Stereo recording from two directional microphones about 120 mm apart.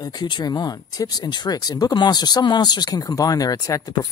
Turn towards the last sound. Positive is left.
turn(degrees=30)  # may be behind; listen again after turning